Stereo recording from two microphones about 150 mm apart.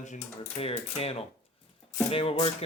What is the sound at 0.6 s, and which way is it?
Speech, 40° left (ahead or behind).